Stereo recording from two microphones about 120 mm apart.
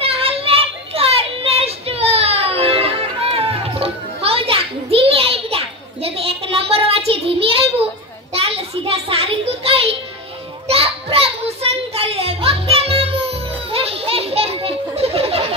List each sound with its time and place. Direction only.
0.0 s child singing: 50° right (ahead or behind)
8.3 s a sound: 55° right (ahead or behind)
10.7 s children playing: 55° right (ahead or behind)